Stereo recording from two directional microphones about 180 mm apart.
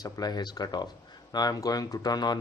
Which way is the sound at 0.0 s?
20° left (ahead or behind).